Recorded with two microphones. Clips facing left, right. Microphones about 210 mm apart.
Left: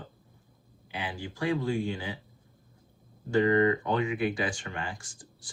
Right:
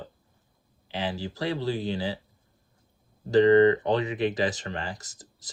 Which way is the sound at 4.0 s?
40° right (ahead or behind).